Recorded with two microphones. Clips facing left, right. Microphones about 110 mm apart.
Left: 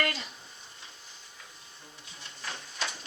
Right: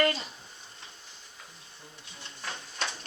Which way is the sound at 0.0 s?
30° right (ahead or behind).